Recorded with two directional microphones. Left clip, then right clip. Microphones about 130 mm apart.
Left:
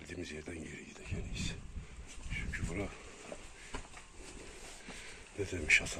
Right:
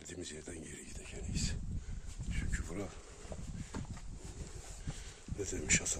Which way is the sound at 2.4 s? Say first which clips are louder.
Left 3 dB; 50° right (ahead or behind).